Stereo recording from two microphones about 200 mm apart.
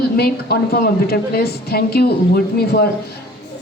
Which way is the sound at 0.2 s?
50° left (ahead or behind).